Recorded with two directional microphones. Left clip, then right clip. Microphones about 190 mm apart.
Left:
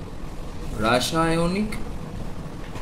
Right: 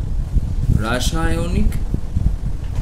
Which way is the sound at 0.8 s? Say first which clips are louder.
Left 2 dB; 60° right (ahead or behind).